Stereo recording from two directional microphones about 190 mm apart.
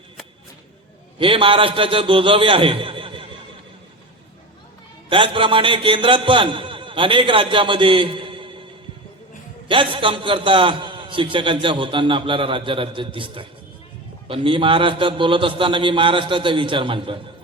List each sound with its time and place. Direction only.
1.2 s a man's voice: 30° right (ahead or behind)
5.0 s a man's voice: 25° right (ahead or behind)
9.6 s a man's voice: 25° right (ahead or behind)